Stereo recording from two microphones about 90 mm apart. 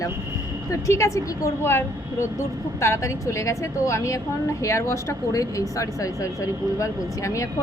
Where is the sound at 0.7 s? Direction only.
35° left (ahead or behind).